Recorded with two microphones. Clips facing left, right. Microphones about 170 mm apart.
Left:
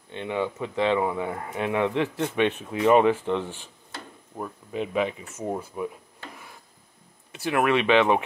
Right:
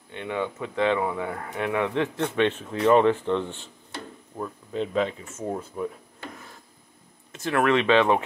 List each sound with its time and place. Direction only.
0.1 s speech: 20° left (ahead or behind)
7.4 s speech: 10° left (ahead or behind)